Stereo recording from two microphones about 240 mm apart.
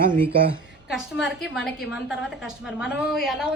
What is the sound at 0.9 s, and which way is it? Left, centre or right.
A woman's voice, centre.